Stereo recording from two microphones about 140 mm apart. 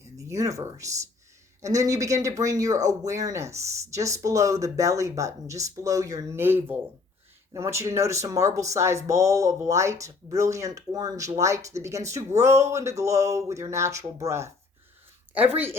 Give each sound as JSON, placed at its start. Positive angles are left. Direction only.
{"t": 0.0, "sound": "speech", "side_deg": -20}